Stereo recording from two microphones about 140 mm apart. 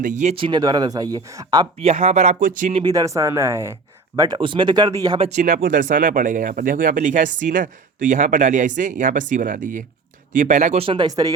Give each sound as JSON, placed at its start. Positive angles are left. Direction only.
{"t": 0.0, "sound": "speech", "side_deg": -60}
{"t": 0.3, "sound": "speech", "side_deg": -35}
{"t": 1.8, "sound": "speech", "side_deg": -55}
{"t": 2.8, "sound": "speech", "side_deg": -25}
{"t": 5.3, "sound": "speech", "side_deg": -60}
{"t": 5.6, "sound": "speech", "side_deg": -70}
{"t": 10.8, "sound": "speech", "side_deg": -30}